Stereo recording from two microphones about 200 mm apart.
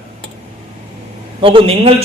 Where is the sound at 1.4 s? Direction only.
25° right (ahead or behind).